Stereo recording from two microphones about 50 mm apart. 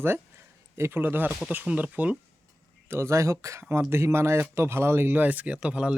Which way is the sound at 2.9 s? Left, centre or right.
Right.